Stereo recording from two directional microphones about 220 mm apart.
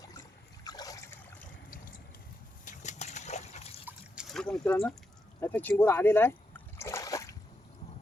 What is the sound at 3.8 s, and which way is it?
Trickle, centre (ahead or behind).